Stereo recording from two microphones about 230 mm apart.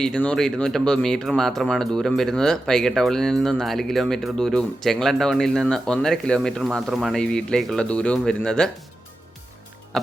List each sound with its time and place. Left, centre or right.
0.0 s speech: centre
9.9 s music: centre